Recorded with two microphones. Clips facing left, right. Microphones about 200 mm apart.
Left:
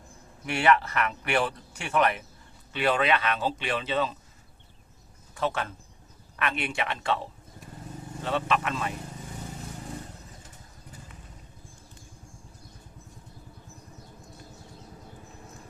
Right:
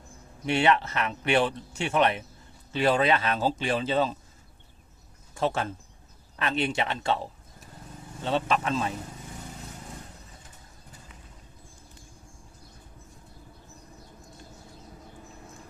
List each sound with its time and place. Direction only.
0.4 s speech: 25° right (ahead or behind)
5.3 s speech: 30° right (ahead or behind)
8.2 s speech: 30° right (ahead or behind)